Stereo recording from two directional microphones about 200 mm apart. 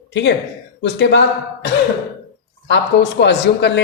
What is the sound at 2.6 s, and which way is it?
A woman's voice, 60° left (ahead or behind).